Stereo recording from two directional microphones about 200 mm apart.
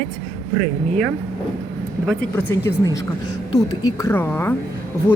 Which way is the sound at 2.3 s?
10° left (ahead or behind).